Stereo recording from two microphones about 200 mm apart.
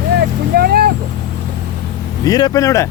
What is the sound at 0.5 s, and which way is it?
Speech, 50° right (ahead or behind).